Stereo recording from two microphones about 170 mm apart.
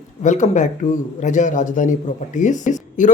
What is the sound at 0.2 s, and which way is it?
A man's voice, 45° left (ahead or behind).